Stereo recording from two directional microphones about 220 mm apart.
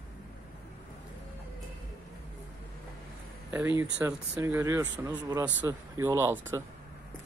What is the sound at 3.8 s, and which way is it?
Speech, 10° right (ahead or behind).